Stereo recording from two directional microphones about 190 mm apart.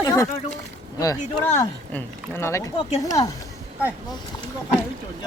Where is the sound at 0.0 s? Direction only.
20° left (ahead or behind).